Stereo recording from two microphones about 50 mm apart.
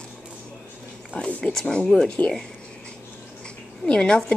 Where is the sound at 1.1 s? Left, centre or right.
Left.